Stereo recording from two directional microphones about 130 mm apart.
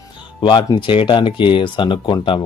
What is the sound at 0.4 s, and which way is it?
Speech, 40° left (ahead or behind).